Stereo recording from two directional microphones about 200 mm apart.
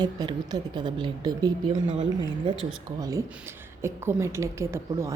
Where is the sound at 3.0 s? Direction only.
15° right (ahead or behind).